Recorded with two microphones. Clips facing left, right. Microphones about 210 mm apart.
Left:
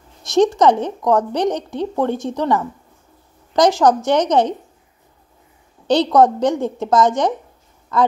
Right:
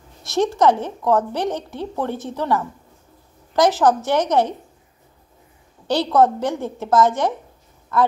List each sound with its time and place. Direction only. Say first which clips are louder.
0.2 s a sound: left 6 dB; 15° left (ahead or behind)
0.6 s a woman's voice: left 2 dB; 15° left (ahead or behind)
5.9 s a woman's voice: left 3 dB; 15° left (ahead or behind)